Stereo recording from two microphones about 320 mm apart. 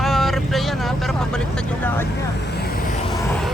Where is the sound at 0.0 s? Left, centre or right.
Centre.